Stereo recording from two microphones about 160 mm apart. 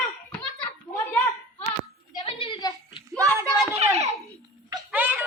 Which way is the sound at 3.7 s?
40° right (ahead or behind).